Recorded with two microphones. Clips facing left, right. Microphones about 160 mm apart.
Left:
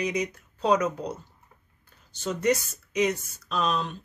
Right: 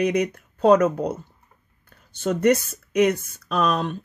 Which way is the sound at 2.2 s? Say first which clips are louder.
Right 6 dB; 55° right (ahead or behind).